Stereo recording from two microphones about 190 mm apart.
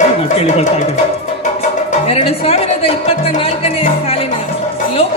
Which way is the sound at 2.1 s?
30° left (ahead or behind).